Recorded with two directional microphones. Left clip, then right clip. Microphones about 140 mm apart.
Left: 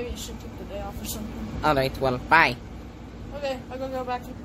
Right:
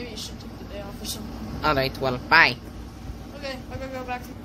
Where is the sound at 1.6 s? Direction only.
10° left (ahead or behind).